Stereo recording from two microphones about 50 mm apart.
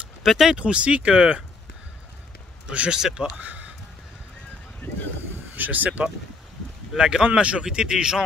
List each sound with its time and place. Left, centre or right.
0.2 s speech: centre
0.6 s speech: right
2.9 s speech: centre
3.4 s a sound: right
4.8 s boat: left
5.6 s speech: right
7.0 s speech: centre